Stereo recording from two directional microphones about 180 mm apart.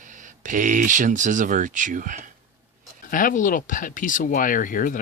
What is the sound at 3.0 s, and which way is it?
Speech, 50° left (ahead or behind).